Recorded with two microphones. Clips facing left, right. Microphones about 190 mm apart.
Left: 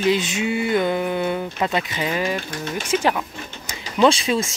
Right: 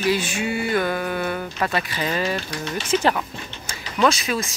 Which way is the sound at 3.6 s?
15° left (ahead or behind).